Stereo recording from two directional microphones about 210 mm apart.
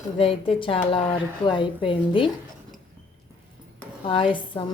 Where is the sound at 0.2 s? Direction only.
25° left (ahead or behind).